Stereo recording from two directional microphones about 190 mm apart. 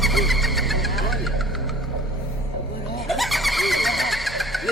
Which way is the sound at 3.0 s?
Centre (ahead or behind).